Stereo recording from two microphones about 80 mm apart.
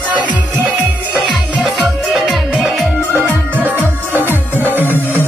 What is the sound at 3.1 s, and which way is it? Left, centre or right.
Music, right.